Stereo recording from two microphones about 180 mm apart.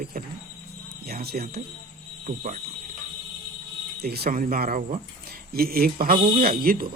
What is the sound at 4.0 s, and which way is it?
Speech, 60° right (ahead or behind).